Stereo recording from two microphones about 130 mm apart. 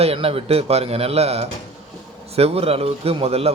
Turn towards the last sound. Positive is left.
turn(degrees=-50)  # may be behind; listen again after turning